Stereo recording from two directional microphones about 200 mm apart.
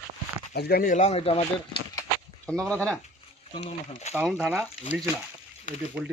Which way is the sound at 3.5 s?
35° left (ahead or behind).